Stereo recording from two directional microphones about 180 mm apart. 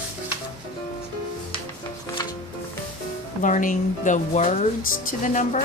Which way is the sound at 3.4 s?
45° left (ahead or behind).